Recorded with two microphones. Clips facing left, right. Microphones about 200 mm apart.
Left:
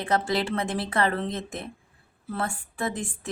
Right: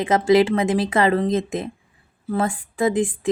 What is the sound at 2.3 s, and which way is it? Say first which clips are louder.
Speech: right 8 dB; 90° right.